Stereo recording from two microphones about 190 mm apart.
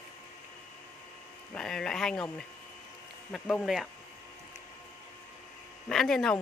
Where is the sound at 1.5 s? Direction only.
5° left (ahead or behind).